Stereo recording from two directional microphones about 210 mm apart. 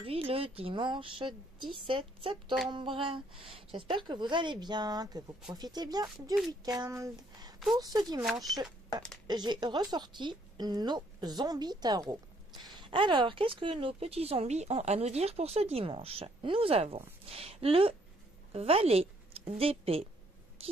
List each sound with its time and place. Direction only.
0.0 s a woman's voice: 25° right (ahead or behind)
8.2 s speech: centre (ahead or behind)
9.3 s a woman's voice: 20° right (ahead or behind)